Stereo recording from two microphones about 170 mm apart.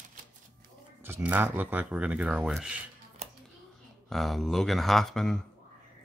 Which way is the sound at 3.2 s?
40° right (ahead or behind).